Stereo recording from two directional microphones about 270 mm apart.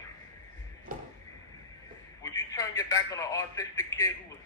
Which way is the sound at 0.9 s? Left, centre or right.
Right.